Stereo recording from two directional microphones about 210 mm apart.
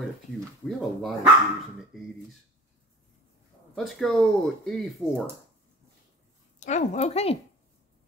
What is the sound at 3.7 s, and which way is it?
Speech, centre (ahead or behind).